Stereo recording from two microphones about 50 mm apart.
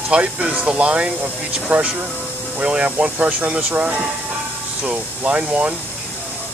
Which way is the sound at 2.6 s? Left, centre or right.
Centre.